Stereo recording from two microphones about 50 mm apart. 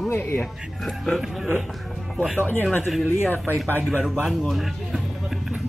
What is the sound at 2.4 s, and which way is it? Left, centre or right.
Speech, left.